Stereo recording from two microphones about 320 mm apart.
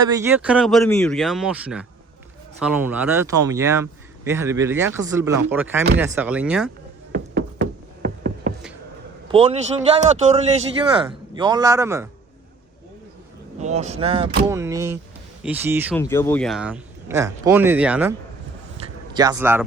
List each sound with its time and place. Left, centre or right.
0.1 s speech: centre
7.1 s music: right
9.3 s a man's voice: centre
13.6 s speech: right
16.0 s speech: centre
19.1 s speech: centre